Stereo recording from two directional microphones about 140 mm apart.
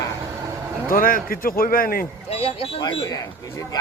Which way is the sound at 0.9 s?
90° left.